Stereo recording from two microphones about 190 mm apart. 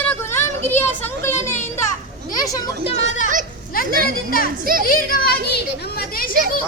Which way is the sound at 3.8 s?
50° right (ahead or behind).